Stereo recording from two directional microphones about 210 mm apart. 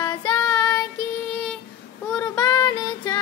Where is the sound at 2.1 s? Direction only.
15° left (ahead or behind).